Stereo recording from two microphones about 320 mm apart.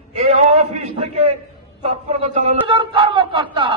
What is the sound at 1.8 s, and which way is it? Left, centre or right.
Speech, right.